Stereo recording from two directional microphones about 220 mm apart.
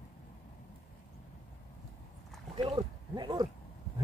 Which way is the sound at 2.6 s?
20° right (ahead or behind).